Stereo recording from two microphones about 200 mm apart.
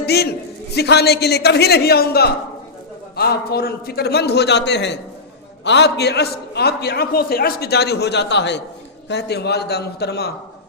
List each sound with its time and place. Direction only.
0.0 s a man's voice: 50° left (ahead or behind)